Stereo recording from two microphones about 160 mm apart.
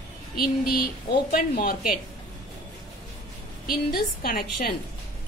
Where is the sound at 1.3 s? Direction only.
70° left (ahead or behind).